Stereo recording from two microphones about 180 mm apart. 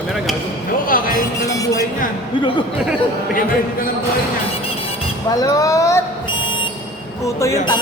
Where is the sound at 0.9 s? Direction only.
50° left (ahead or behind).